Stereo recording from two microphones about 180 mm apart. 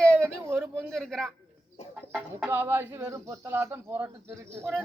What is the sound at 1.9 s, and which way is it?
Speech, 10° right (ahead or behind).